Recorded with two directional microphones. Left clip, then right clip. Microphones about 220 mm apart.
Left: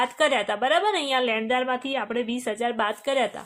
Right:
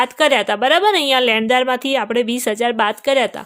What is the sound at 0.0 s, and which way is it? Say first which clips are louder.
A woman's voice: right 7 dB; 30° right (ahead or behind).